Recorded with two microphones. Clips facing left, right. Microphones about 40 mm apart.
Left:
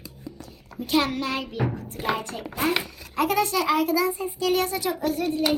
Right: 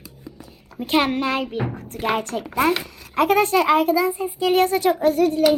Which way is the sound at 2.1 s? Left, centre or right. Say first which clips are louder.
Right 7 dB; right.